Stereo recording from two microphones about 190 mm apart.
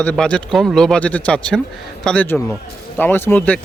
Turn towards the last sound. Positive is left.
turn(degrees=10)  # may be behind; listen again after turning